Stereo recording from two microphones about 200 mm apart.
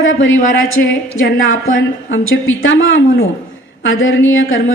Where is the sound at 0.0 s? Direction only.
75° left (ahead or behind).